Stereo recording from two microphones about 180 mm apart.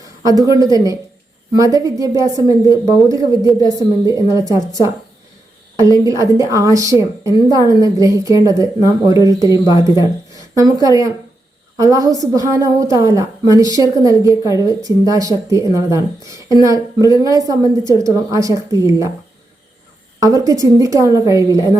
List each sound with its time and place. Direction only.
0.0 s a woman's voice: 20° right (ahead or behind)
20.1 s a woman's voice: 20° right (ahead or behind)